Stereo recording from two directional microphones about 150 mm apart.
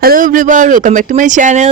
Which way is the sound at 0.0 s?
70° right (ahead or behind).